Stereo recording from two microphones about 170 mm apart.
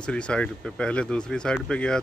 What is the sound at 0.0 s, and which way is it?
Speech, 5° left (ahead or behind).